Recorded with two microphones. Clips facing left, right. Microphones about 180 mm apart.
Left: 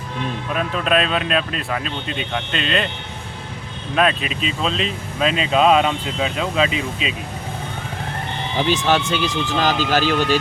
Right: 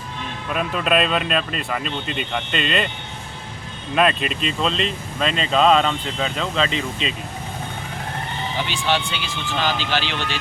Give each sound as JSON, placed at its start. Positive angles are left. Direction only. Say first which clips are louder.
{"t": 0.5, "sound": "speech", "louder": "even", "side_deg": 0}
{"t": 3.9, "sound": "speech", "louder": "even", "side_deg": 0}
{"t": 8.6, "sound": "speech", "louder": "left 6 dB", "side_deg": 40}